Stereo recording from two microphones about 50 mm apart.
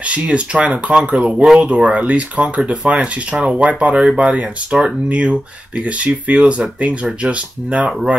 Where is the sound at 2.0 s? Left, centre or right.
Right.